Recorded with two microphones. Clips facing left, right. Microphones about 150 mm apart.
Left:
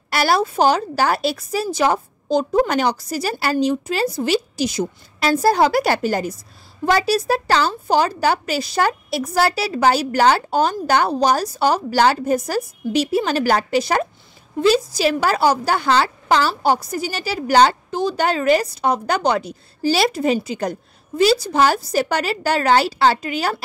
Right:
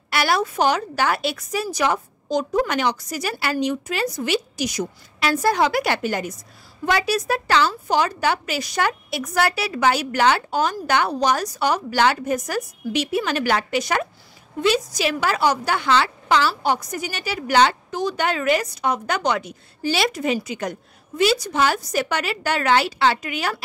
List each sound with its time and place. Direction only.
0.1 s a woman's voice: 35° left (ahead or behind)